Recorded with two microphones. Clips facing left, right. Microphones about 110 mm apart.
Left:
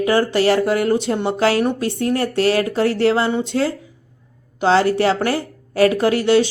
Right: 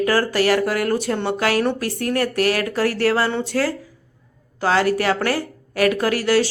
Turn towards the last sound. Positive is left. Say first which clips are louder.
# left 3 dB
turn(degrees=25)  # may be behind; listen again after turning